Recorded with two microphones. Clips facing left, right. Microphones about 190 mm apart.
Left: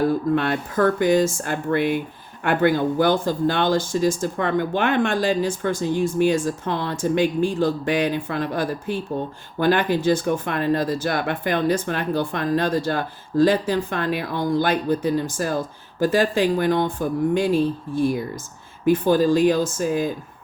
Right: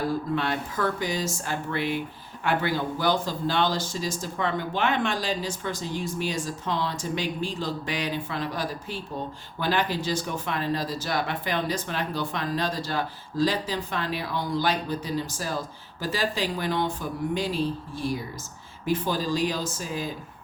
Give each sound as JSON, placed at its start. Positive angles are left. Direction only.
{"t": 0.1, "sound": "speech", "side_deg": 55}